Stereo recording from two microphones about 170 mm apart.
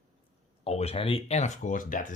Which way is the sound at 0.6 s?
35° left (ahead or behind).